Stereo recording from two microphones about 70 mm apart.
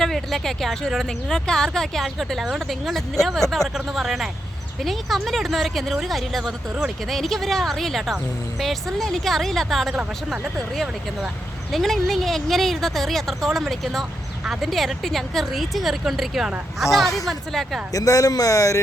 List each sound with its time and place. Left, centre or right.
0.0 s speech: centre
11.7 s speech: centre
17.9 s speech: left